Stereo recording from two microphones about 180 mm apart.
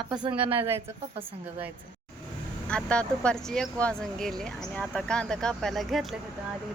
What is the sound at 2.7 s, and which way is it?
Speech, 5° left (ahead or behind).